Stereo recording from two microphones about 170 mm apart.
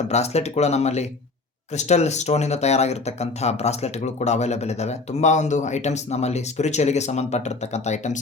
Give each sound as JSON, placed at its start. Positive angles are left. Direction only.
{"t": 0.1, "sound": "speech", "side_deg": 40}